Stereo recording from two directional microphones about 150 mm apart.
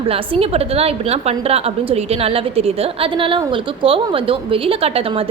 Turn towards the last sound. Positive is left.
turn(degrees=-40)  # may be behind; listen again after turning